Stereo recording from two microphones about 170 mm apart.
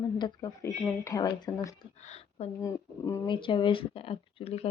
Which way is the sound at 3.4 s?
30° left (ahead or behind).